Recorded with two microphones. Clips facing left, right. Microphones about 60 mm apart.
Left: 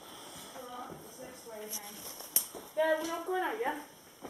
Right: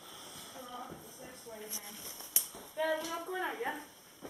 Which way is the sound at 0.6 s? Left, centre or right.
Centre.